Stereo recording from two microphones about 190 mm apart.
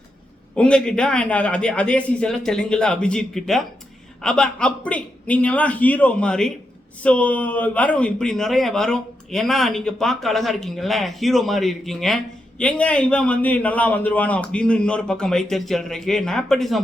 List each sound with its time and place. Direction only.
0.5 s a man's voice: 5° left (ahead or behind)